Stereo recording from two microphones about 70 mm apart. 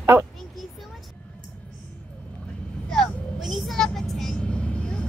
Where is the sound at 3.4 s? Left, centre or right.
Centre.